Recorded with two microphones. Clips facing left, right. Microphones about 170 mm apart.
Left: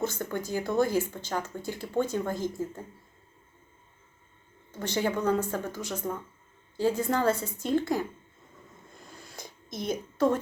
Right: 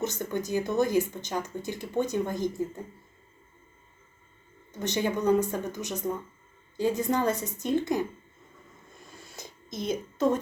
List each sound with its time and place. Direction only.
0.0 s speech: 20° right (ahead or behind)
4.8 s speech: 20° right (ahead or behind)
9.3 s a sound: 55° left (ahead or behind)